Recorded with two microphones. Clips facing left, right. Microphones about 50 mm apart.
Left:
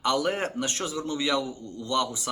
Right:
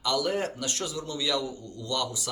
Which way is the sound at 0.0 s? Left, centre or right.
Left.